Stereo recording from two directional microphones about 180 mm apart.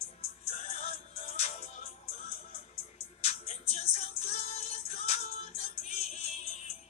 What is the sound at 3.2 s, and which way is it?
Music, 35° left (ahead or behind).